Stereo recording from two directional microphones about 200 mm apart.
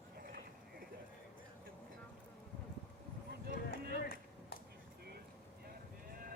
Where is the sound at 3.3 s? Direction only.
50° right (ahead or behind).